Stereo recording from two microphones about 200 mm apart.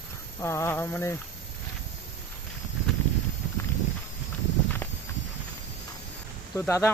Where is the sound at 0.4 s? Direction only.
15° left (ahead or behind).